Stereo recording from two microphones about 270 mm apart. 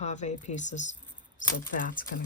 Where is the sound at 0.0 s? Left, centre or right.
Left.